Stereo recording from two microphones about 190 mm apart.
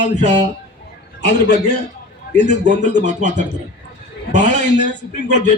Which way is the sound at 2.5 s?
40° right (ahead or behind).